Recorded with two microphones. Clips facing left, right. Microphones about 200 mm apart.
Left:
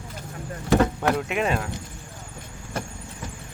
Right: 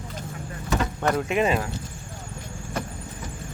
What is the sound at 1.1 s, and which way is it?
Speech, centre (ahead or behind).